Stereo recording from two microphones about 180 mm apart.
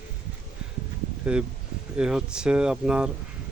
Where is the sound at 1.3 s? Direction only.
5° right (ahead or behind).